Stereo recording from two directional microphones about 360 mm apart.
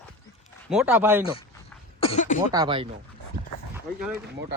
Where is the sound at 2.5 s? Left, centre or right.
Centre.